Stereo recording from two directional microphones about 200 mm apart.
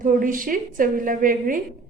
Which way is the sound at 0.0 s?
40° right (ahead or behind).